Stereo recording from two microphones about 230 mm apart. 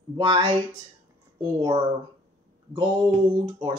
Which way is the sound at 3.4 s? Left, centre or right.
Right.